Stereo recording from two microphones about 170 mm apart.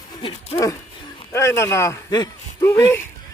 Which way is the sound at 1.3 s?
15° left (ahead or behind).